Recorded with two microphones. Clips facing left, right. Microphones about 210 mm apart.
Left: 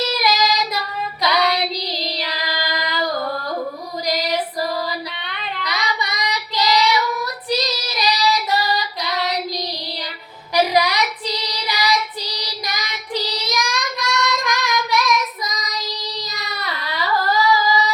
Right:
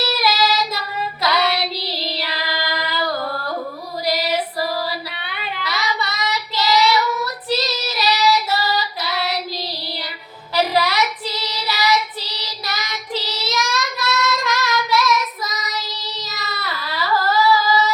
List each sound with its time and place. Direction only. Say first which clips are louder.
0.0 s child singing: even; 15° left (ahead or behind)
5.3 s child singing: right 3 dB; 5° right (ahead or behind)
5.6 s child singing: right 1 dB; 15° left (ahead or behind)
10.5 s child singing: left 1 dB; 15° left (ahead or behind)